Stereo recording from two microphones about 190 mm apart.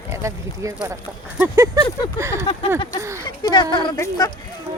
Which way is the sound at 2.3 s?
30° left (ahead or behind).